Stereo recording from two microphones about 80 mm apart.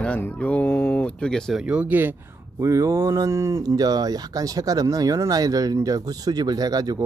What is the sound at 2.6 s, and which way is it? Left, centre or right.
Speech, right.